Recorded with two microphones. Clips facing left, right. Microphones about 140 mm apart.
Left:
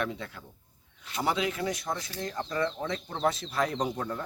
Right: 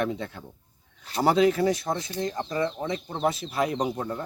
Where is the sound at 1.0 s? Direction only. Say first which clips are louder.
Right 9 dB; 40° right (ahead or behind); by 4.2 s 15° right (ahead or behind).